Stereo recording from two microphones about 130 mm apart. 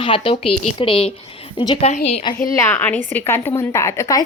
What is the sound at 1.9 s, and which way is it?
Speech, 55° left (ahead or behind).